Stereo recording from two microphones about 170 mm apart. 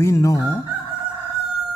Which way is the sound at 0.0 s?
20° left (ahead or behind).